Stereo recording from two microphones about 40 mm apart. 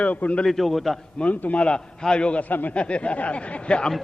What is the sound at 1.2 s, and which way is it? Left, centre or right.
A man's voice, left.